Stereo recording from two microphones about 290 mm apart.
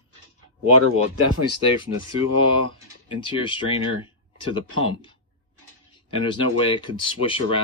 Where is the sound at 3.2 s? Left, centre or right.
Centre.